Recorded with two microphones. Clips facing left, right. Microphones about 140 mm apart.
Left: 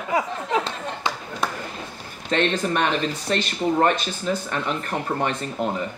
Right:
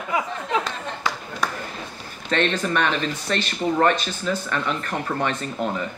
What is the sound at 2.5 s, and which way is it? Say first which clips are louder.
Speech: left 1 dB; 20° left (ahead or behind).